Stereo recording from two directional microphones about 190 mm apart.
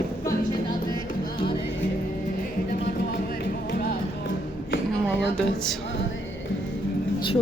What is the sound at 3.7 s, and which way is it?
Music, 55° left (ahead or behind).